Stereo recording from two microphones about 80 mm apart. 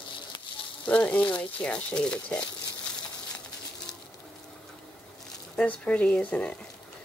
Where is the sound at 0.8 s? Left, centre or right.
Centre.